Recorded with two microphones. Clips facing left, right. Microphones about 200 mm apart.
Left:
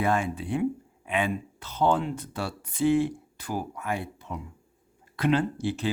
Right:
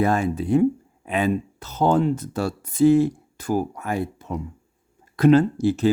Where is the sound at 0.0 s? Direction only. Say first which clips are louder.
Right 5 dB; 40° right (ahead or behind).